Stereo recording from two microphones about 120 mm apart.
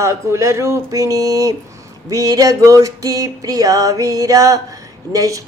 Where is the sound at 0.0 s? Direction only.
25° right (ahead or behind).